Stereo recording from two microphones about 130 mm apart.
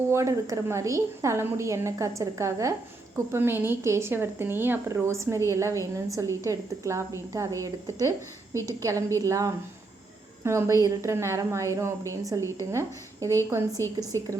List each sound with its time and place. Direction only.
0.1 s a woman's voice: 25° right (ahead or behind)